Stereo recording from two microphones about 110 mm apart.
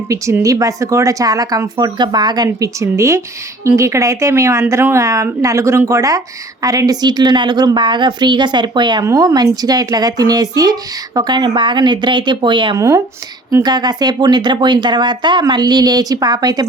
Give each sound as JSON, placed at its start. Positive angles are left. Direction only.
{"t": 0.1, "sound": "speech", "side_deg": -30}
{"t": 9.0, "sound": "speech", "side_deg": -35}
{"t": 12.7, "sound": "speech", "side_deg": -30}